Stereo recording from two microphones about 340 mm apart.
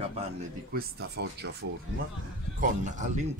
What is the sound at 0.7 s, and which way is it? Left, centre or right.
Speech, right.